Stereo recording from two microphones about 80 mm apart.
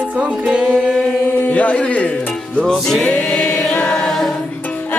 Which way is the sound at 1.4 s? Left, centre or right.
Centre.